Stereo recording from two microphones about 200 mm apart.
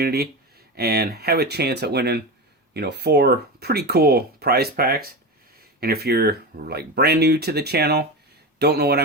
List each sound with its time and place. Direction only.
0.0 s speech: 50° right (ahead or behind)